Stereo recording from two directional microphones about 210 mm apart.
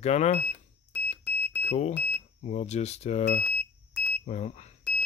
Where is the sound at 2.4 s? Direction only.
35° left (ahead or behind).